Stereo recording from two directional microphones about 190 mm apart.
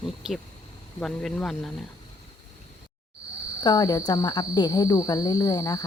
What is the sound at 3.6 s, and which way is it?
Cricket, 20° left (ahead or behind).